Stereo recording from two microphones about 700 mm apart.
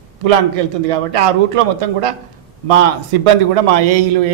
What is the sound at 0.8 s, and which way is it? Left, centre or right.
A man's voice, right.